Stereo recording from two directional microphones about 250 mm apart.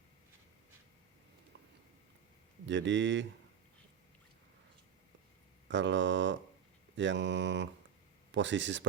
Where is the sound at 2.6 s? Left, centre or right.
Right.